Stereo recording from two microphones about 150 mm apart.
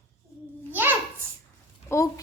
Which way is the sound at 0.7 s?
15° right (ahead or behind).